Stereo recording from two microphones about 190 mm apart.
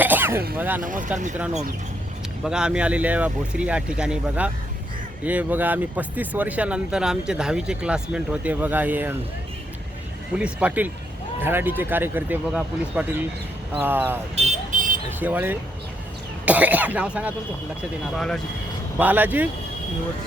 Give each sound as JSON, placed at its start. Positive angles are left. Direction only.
{"t": 0.0, "sound": "throat clearing", "side_deg": -10}
{"t": 0.5, "sound": "speech", "side_deg": -10}
{"t": 0.8, "sound": "speech", "side_deg": -45}
{"t": 2.4, "sound": "speech", "side_deg": -5}
{"t": 10.3, "sound": "speech", "side_deg": -5}
{"t": 14.3, "sound": "vehicle", "side_deg": -40}
{"t": 15.2, "sound": "speech", "side_deg": -10}
{"t": 18.9, "sound": "speech", "side_deg": -10}